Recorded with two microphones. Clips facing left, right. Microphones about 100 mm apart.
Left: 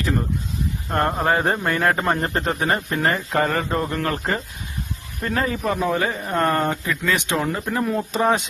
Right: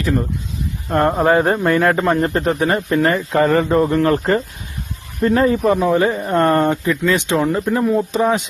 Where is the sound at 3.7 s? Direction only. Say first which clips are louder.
Right 9 dB; 20° right (ahead or behind).